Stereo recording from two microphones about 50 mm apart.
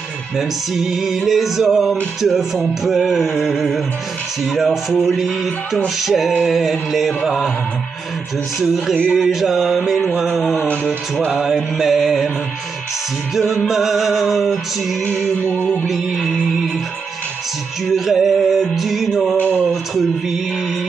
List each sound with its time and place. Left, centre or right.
0.4 s music: centre
8.5 s music: centre
13.3 s music: centre
15.5 s music: left
15.9 s music: centre
17.9 s music: centre